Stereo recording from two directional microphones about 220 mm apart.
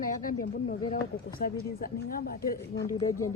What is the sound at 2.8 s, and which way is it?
Speech, 15° left (ahead or behind).